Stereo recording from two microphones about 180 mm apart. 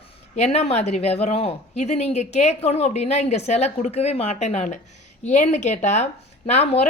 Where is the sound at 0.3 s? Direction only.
35° left (ahead or behind).